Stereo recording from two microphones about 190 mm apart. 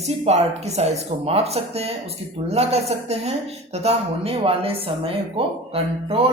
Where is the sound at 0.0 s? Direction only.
35° right (ahead or behind).